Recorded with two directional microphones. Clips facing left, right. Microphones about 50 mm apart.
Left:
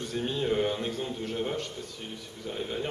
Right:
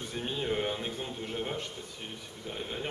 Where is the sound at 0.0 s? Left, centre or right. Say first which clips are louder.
Left 4 dB; centre.